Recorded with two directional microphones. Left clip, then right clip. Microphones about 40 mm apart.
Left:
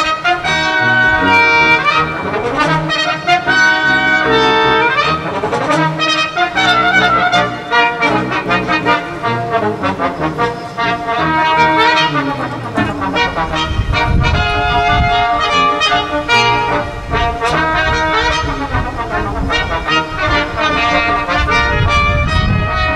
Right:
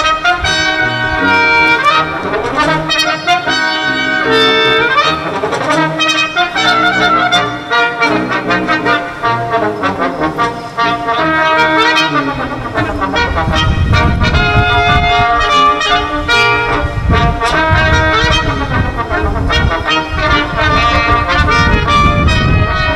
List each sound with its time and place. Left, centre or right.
0.0 s trumpet: centre
0.7 s music: centre
3.1 s trumpet: centre
5.7 s brass instrument: centre
7.2 s music: centre
8.0 s trombone: right
13.9 s music: right
17.1 s brass instrument: right
19.5 s music: right